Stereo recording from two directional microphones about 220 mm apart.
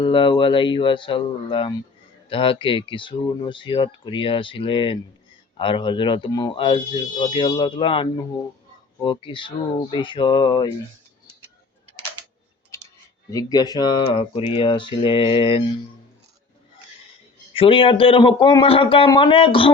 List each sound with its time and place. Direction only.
0.0 s speech: 20° left (ahead or behind)
9.0 s speech: 20° left (ahead or behind)
12.7 s clicking: 15° left (ahead or behind)
13.3 s speech: 15° left (ahead or behind)
17.5 s speech: 25° left (ahead or behind)